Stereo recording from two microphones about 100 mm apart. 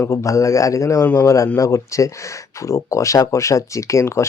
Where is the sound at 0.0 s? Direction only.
30° left (ahead or behind).